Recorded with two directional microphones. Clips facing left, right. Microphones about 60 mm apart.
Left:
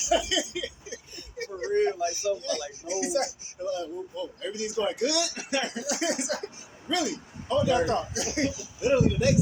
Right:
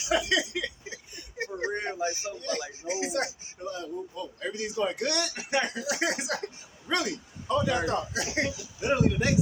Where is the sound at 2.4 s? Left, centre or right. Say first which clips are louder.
Even; right.